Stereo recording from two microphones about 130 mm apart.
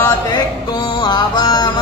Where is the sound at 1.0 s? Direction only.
35° left (ahead or behind).